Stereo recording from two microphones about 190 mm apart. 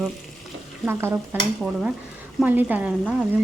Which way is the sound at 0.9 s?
10° right (ahead or behind).